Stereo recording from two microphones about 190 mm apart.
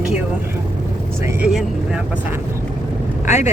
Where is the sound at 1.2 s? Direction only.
15° right (ahead or behind).